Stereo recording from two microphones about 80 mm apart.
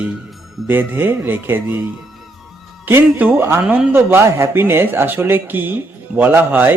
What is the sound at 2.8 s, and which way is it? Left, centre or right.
Speech, right.